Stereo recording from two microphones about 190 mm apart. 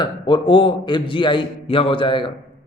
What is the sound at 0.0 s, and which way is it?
A man's voice, 25° left (ahead or behind).